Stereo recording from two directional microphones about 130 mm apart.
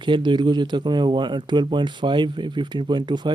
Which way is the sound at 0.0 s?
40° right (ahead or behind).